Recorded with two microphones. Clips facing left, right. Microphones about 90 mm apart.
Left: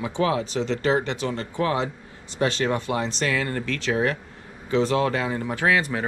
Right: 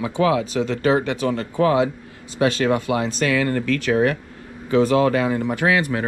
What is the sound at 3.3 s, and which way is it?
Speech, 90° right.